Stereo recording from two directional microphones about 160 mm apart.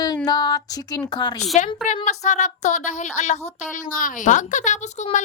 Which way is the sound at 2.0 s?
45° left (ahead or behind).